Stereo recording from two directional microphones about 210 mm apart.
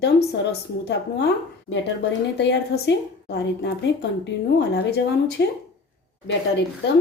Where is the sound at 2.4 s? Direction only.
55° left (ahead or behind).